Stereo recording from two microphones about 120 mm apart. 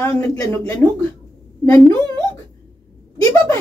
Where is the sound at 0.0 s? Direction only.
20° left (ahead or behind).